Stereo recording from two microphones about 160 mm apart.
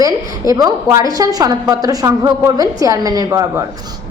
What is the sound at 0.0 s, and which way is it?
A woman's voice, 20° right (ahead or behind).